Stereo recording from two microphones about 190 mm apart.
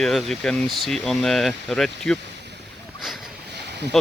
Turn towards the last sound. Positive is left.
turn(degrees=-60)  # may be behind; listen again after turning